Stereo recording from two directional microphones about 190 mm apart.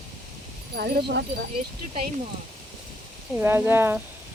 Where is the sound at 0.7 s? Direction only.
55° right (ahead or behind).